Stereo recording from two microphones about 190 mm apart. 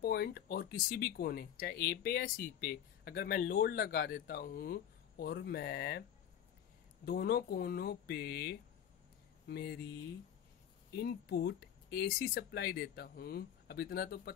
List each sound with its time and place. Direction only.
0.0 s speech: 55° left (ahead or behind)
7.1 s speech: 50° left (ahead or behind)
10.9 s speech: 55° left (ahead or behind)